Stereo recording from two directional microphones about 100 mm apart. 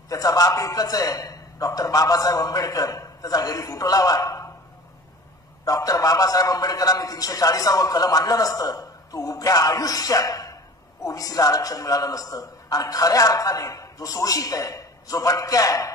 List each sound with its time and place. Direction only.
0.1 s a man's voice: 35° left (ahead or behind)
5.7 s a man's voice: 35° left (ahead or behind)